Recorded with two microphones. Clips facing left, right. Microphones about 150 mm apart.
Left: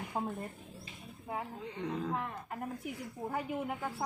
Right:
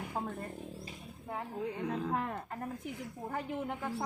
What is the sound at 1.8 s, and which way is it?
Speech, 5° right (ahead or behind).